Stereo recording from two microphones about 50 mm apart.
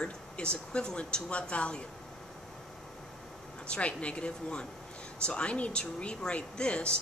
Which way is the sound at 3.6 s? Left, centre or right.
Left.